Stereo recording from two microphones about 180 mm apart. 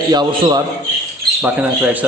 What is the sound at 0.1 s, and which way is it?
Speech, 25° right (ahead or behind).